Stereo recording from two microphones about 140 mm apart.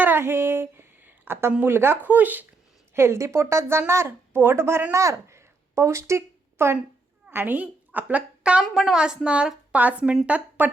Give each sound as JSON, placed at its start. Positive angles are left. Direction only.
{"t": 0.0, "sound": "a woman's voice", "side_deg": -15}